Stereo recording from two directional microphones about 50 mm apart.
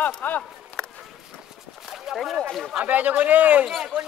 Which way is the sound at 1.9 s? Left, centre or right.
Centre.